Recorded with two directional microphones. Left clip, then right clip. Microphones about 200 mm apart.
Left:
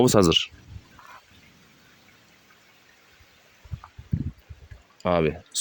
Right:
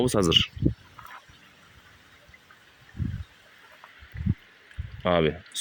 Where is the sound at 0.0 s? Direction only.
25° left (ahead or behind).